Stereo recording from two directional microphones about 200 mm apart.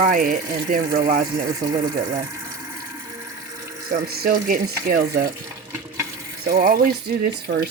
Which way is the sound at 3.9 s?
50° right (ahead or behind).